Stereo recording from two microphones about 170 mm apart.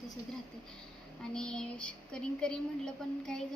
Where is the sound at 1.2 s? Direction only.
5° left (ahead or behind).